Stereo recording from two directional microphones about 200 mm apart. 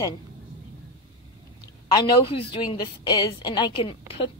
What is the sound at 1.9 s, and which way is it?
A woman's voice, 30° left (ahead or behind).